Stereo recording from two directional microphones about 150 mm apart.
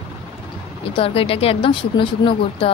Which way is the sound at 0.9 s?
40° left (ahead or behind).